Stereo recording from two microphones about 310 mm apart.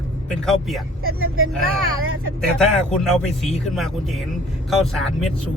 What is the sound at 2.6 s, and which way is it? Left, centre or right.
Speech, centre.